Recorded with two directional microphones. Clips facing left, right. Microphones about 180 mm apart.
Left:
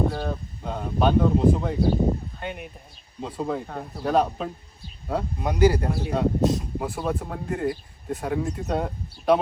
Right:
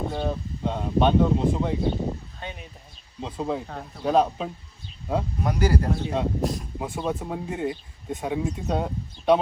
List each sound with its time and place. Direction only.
0.0 s speech: centre (ahead or behind)
2.0 s a sound: 15° left (ahead or behind)
3.2 s speech: centre (ahead or behind)
5.4 s speech: 25° left (ahead or behind)
5.9 s speech: 5° left (ahead or behind)
6.4 s speech: 25° left (ahead or behind)
6.7 s speech: centre (ahead or behind)